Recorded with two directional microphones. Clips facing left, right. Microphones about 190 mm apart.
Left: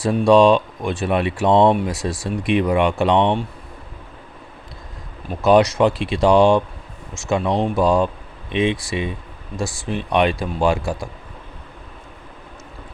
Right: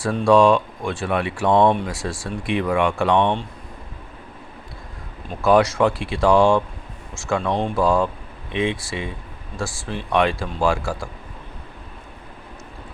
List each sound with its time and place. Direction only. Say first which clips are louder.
0.0 s speech: left 2 dB; 15° left (ahead or behind)
5.4 s speech: left 2 dB; 20° left (ahead or behind)